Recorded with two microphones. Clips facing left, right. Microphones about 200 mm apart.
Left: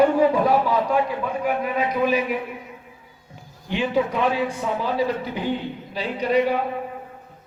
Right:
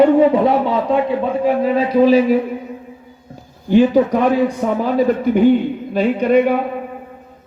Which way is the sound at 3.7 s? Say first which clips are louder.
Right 10 dB; 40° right (ahead or behind).